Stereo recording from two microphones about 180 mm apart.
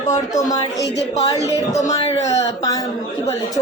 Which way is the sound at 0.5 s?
20° left (ahead or behind).